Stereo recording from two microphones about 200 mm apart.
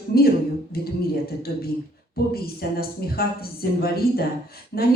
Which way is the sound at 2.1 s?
50° left (ahead or behind).